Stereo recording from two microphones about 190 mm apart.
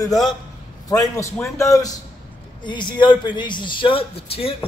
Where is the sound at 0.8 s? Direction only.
15° left (ahead or behind).